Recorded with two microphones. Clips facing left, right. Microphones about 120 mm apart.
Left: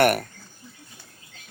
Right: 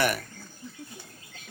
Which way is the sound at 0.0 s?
60° left (ahead or behind).